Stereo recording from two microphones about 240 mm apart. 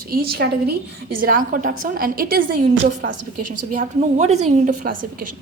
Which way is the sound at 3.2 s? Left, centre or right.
Right.